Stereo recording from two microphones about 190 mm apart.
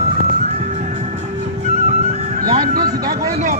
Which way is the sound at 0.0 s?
35° right (ahead or behind).